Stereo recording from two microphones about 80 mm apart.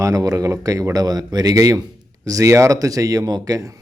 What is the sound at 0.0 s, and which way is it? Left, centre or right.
Speech, right.